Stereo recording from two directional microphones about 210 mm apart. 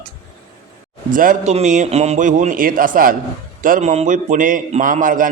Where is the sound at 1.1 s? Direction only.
40° right (ahead or behind).